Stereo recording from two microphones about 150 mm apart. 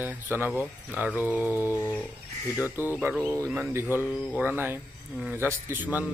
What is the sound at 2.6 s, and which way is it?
A man's voice, 15° right (ahead or behind).